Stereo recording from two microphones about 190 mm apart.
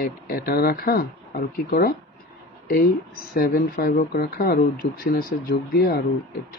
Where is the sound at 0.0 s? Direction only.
50° left (ahead or behind).